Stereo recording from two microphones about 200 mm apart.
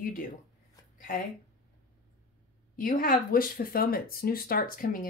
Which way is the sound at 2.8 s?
45° left (ahead or behind).